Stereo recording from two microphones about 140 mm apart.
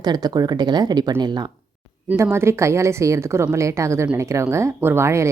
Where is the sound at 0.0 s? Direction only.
30° right (ahead or behind).